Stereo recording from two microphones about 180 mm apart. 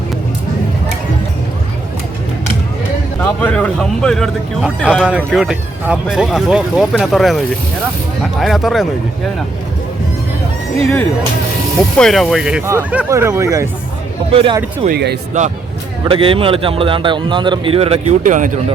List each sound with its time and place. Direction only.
3.4 s speech: 5° left (ahead or behind)
8.4 s speech: centre (ahead or behind)
11.9 s speech: centre (ahead or behind); by 13.7 s 15° right (ahead or behind)
14.3 s speech: 30° right (ahead or behind)
14.8 s speech: 65° right (ahead or behind)
15.3 s speech: 40° right (ahead or behind)
16.0 s speech: 30° right (ahead or behind); by 18.6 s 45° right (ahead or behind)